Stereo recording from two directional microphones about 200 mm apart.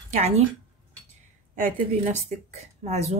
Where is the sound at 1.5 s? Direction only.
40° right (ahead or behind).